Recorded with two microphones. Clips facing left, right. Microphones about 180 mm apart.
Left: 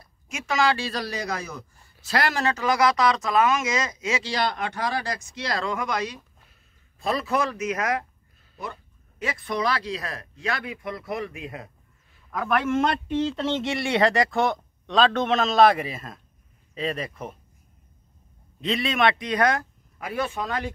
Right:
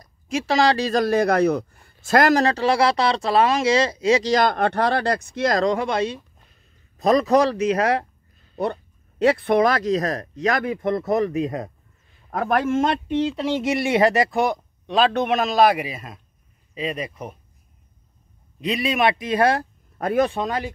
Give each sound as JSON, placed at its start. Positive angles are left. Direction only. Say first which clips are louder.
{"t": 0.0, "sound": "speech", "louder": "right 12 dB", "side_deg": -35}
{"t": 7.0, "sound": "speech", "louder": "right 9 dB", "side_deg": -40}
{"t": 9.2, "sound": "a man's voice", "louder": "right 10 dB", "side_deg": -60}
{"t": 12.7, "sound": "speech", "louder": "right 3 dB", "side_deg": -25}
{"t": 16.7, "sound": "speech", "louder": "right 1 dB", "side_deg": -5}
{"t": 18.7, "sound": "speech", "louder": "right 2 dB", "side_deg": -20}